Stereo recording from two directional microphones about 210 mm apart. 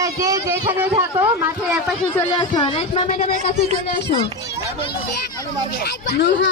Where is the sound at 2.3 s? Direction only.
25° left (ahead or behind).